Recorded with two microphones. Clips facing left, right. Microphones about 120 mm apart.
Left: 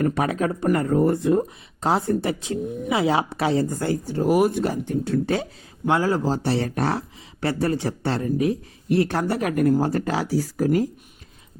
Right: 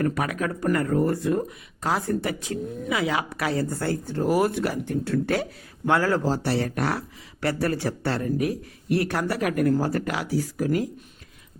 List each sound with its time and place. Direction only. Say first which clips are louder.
0.0 s speech: left 3 dB; 25° left (ahead or behind)